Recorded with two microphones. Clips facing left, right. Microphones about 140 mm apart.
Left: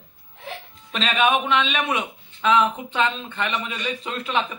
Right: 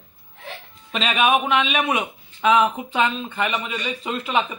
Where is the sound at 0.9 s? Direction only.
5° right (ahead or behind).